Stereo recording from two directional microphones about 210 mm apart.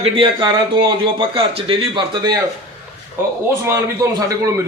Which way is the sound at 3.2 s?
10° right (ahead or behind).